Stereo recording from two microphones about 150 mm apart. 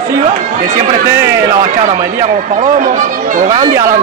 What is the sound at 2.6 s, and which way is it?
Speech, 65° right (ahead or behind).